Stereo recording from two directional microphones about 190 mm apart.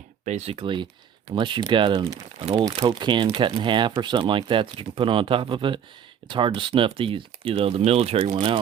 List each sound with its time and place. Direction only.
0.3 s speech: 35° right (ahead or behind)